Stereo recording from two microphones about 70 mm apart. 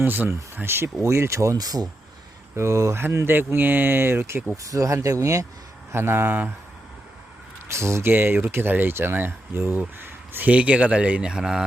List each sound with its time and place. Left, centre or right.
0.0 s speech: right
1.5 s speech: right
2.6 s speech: right
3.0 s speech: right
4.5 s speech: right
5.9 s speech: right
7.7 s speech: right; by 11.6 s centre